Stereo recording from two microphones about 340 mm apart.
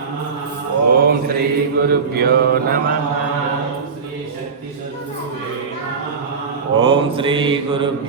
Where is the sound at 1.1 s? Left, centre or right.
Right.